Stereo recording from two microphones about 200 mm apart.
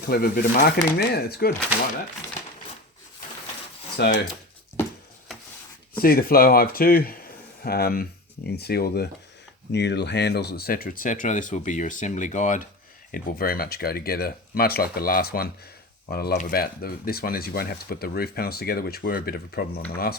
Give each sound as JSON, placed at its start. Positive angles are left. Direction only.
{"t": 0.1, "sound": "speech", "side_deg": 50}
{"t": 4.0, "sound": "speech", "side_deg": 55}
{"t": 6.0, "sound": "speech", "side_deg": 50}